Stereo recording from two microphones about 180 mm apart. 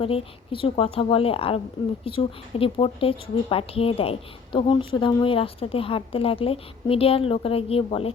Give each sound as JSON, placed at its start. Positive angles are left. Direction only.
{"t": 0.0, "sound": "a woman's voice", "side_deg": 30}